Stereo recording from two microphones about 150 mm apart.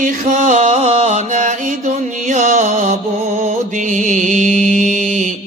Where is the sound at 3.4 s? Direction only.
55° right (ahead or behind).